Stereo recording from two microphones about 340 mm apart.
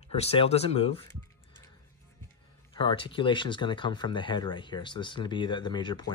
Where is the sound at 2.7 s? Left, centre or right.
Centre.